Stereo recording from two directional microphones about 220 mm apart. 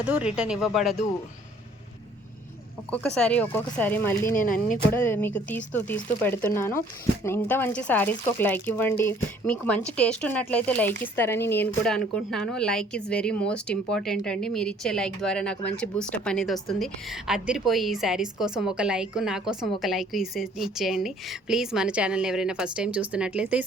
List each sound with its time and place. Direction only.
0.0 s speech: 5° right (ahead or behind)
3.2 s speech: 5° left (ahead or behind)
4.4 s speech: 40° left (ahead or behind)
4.9 s speech: 10° left (ahead or behind); by 23.6 s 5° right (ahead or behind)